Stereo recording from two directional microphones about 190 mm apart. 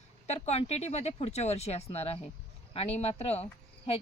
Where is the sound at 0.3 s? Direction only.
35° left (ahead or behind).